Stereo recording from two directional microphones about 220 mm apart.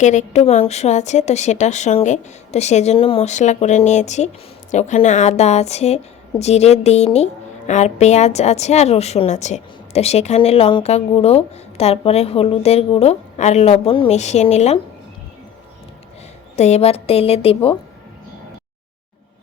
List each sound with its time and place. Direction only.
0.0 s a woman's voice: 35° left (ahead or behind)
16.6 s a woman's voice: 30° left (ahead or behind)